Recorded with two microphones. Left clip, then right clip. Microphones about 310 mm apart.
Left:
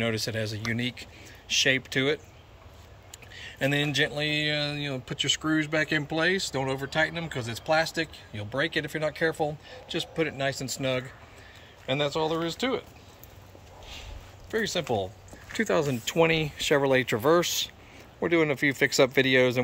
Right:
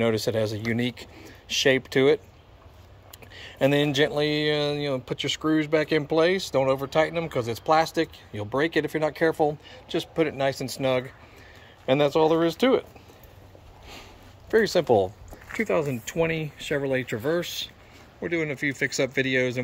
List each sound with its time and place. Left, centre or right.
0.0 s speech: centre
3.3 s speech: centre
14.5 s speech: centre
15.5 s speech: centre